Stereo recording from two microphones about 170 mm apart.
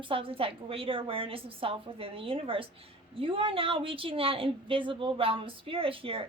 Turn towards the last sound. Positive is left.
turn(degrees=-35)  # may be behind; listen again after turning